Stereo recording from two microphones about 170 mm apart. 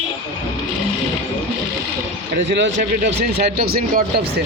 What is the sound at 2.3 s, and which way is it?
Speech, 90° right.